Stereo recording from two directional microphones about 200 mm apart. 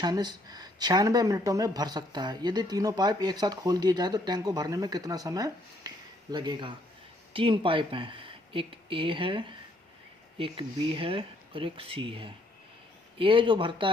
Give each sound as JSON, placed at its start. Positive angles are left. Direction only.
{"t": 0.0, "sound": "speech", "side_deg": -20}